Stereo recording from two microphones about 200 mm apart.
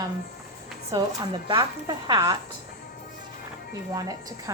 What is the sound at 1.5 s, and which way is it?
Speech, 25° right (ahead or behind).